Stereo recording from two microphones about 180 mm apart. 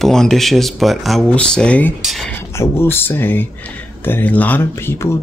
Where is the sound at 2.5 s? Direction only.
10° left (ahead or behind).